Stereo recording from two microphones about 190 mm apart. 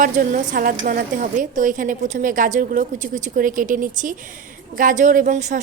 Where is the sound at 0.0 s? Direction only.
45° right (ahead or behind).